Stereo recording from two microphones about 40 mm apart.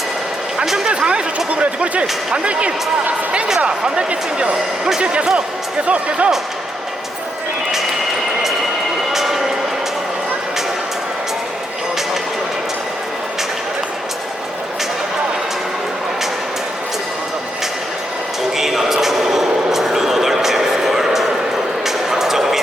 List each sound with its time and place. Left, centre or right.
0.9 s speech: right
9.1 s vehicle: centre
18.5 s a sound: centre